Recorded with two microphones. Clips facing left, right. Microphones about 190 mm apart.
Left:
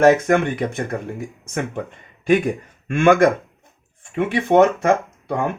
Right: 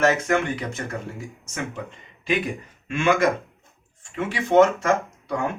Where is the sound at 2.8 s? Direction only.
55° left (ahead or behind).